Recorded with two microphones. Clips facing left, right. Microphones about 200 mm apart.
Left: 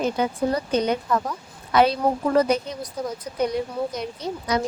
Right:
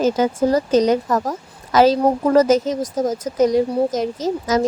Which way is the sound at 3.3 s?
90° right.